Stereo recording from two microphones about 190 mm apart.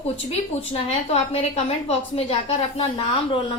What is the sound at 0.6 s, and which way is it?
A woman's voice, 30° left (ahead or behind).